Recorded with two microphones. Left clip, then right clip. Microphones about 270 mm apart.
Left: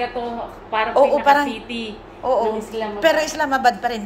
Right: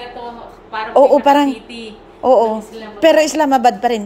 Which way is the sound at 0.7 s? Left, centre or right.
Right.